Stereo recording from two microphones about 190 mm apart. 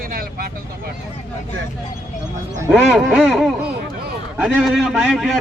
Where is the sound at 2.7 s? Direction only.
Centre (ahead or behind).